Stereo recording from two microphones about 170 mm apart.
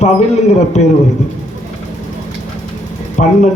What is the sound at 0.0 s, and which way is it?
Speech, 40° left (ahead or behind).